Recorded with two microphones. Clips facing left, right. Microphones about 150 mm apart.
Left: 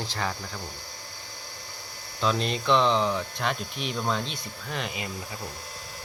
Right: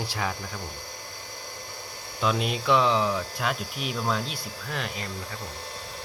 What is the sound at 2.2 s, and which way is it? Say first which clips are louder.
Speech: even; 5° right (ahead or behind).